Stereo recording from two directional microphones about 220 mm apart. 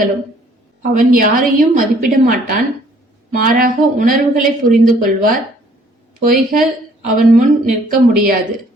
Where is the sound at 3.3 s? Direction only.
40° right (ahead or behind).